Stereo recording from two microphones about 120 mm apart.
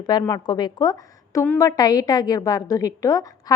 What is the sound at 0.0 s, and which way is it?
A woman's voice, 35° left (ahead or behind).